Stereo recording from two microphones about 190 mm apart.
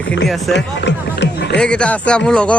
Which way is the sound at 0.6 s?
65° left (ahead or behind).